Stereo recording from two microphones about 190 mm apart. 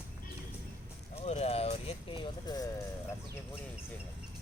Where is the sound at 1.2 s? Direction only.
35° left (ahead or behind).